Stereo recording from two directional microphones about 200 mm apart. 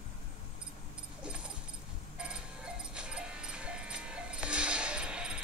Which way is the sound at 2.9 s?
5° right (ahead or behind).